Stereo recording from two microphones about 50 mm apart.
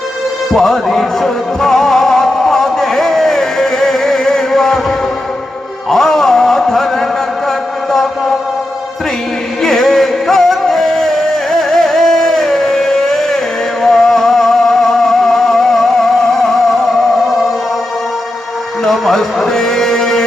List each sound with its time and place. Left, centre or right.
0.5 s music: centre
5.9 s a sound: centre
9.6 s music: centre
18.9 s music: centre